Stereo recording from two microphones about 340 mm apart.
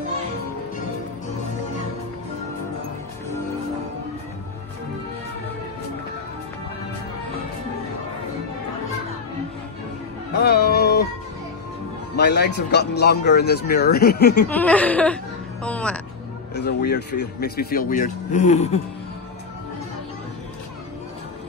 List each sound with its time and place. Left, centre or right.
10.4 s music: left
12.2 s speech: left
14.5 s chuckle: centre
15.6 s speech: centre
16.5 s speech: left